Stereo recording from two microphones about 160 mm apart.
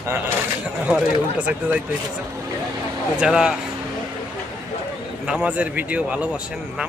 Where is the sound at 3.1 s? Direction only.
5° right (ahead or behind).